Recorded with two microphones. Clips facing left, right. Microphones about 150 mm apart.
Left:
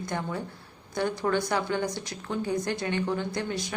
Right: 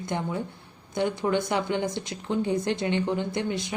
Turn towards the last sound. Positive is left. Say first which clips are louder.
# right 2 dB
turn(degrees=-20)  # may be behind; listen again after turning